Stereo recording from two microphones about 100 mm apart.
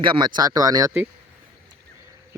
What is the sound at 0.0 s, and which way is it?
Speech, 55° right (ahead or behind).